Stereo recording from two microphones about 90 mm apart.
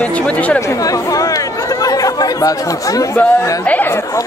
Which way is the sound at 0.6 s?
35° left (ahead or behind).